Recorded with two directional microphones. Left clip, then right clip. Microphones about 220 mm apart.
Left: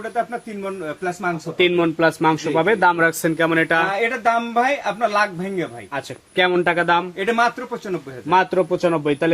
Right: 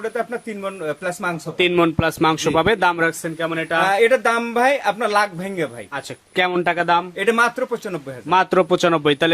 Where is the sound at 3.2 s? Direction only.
30° left (ahead or behind).